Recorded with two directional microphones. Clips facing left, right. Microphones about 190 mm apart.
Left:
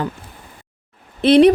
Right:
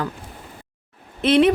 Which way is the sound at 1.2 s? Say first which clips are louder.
Left 5 dB; 35° left (ahead or behind).